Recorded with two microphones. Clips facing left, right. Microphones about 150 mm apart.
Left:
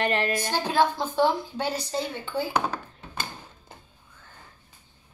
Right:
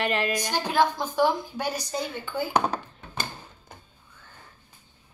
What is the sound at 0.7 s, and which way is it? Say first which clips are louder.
A woman's voice: even; 25° left (ahead or behind).